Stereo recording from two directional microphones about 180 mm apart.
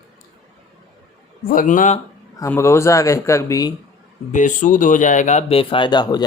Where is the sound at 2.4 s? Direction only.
15° left (ahead or behind).